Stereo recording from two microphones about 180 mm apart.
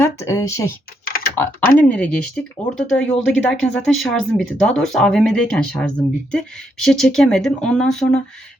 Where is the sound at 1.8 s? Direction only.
10° left (ahead or behind).